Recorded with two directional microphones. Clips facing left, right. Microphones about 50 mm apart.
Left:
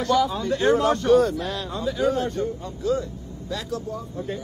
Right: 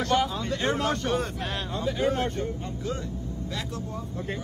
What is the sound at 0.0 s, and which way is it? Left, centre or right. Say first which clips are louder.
A woman's voice: left 4 dB; right.